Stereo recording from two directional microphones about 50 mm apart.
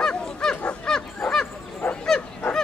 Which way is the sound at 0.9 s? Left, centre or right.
Centre.